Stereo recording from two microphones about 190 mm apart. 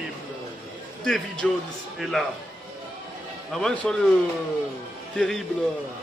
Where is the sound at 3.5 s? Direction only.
5° left (ahead or behind).